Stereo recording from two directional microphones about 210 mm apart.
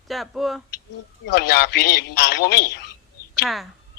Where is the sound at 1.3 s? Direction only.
50° left (ahead or behind).